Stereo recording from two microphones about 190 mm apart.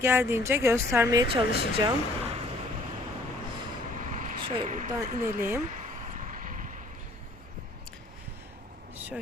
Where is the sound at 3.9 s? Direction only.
40° right (ahead or behind).